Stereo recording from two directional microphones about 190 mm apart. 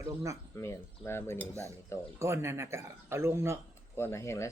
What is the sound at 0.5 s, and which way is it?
Cutlery, 15° left (ahead or behind).